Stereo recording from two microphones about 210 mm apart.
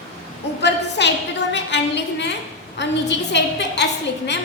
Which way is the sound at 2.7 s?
55° left (ahead or behind).